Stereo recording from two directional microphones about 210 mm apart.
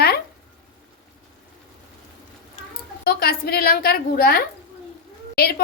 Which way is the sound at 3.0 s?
45° left (ahead or behind).